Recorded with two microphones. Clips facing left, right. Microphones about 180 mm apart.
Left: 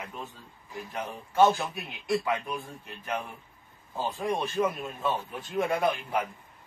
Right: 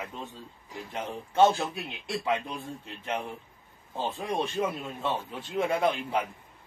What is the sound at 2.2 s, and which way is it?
Speech, 25° right (ahead or behind).